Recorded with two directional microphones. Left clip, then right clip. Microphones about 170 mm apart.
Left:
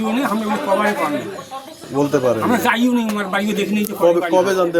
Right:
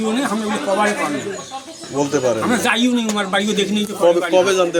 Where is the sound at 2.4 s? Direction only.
10° left (ahead or behind).